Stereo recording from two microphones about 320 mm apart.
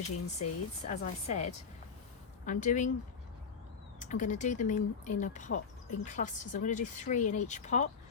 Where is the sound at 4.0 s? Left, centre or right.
Left.